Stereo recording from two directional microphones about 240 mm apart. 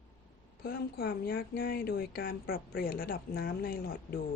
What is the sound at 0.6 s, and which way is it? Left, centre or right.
Speech, left.